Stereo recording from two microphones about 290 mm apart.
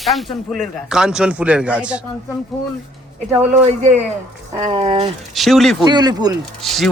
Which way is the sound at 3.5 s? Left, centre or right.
Right.